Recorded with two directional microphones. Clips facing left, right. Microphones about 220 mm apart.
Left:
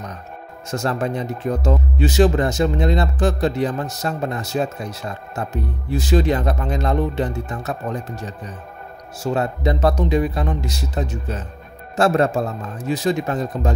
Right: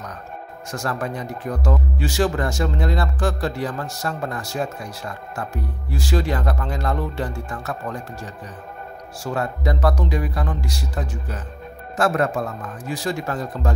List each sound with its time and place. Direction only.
0.7 s speech: 25° left (ahead or behind)